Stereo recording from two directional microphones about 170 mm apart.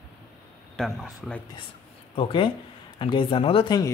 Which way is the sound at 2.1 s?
30° left (ahead or behind).